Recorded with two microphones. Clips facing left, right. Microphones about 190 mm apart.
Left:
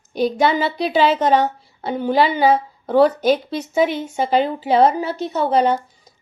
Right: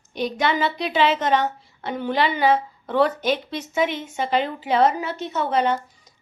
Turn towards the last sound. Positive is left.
turn(degrees=35)  # may be behind; listen again after turning